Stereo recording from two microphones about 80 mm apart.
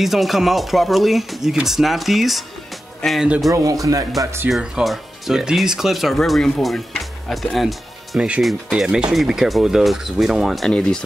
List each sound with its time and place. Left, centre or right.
0.0 s speech: centre
3.0 s speech: centre
3.5 s speech: right
4.5 s speech: centre
10.7 s speech: centre